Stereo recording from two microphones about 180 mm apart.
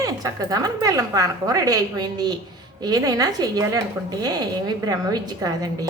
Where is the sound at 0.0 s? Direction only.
20° right (ahead or behind).